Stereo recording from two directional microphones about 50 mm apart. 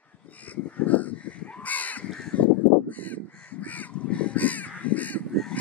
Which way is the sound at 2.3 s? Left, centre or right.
Left.